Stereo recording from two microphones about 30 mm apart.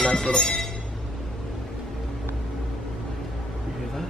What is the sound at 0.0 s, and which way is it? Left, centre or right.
Speech, left.